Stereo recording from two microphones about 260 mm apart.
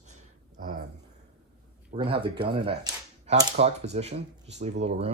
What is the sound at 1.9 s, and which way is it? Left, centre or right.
Speech, right.